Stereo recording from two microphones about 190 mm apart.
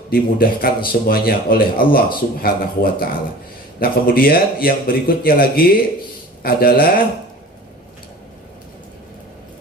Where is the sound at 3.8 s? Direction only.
50° left (ahead or behind).